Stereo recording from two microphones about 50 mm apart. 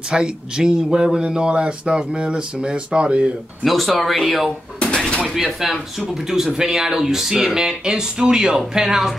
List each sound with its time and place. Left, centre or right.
0.1 s speech: centre
3.6 s speech: centre
4.9 s bird: centre
5.2 s speech: centre